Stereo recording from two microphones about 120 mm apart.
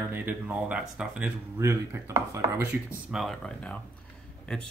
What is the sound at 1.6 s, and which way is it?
Speech, 20° right (ahead or behind).